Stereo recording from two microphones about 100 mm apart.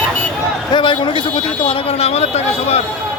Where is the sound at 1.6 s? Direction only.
80° left.